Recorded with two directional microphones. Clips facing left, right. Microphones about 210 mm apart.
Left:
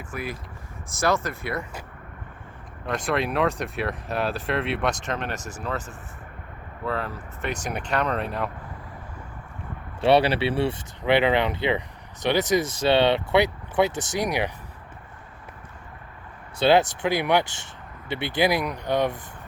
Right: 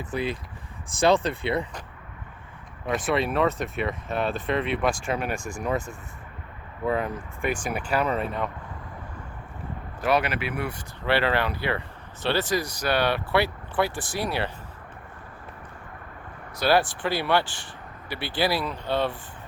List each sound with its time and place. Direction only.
0.0 s speech: 25° right (ahead or behind)
2.8 s speech: centre (ahead or behind)
5.4 s speech: 40° left (ahead or behind)
6.8 s speech: 15° right (ahead or behind); by 8.4 s centre (ahead or behind)
10.0 s speech: 30° left (ahead or behind)
11.0 s speech: 20° left (ahead or behind)
16.6 s speech: 20° left (ahead or behind)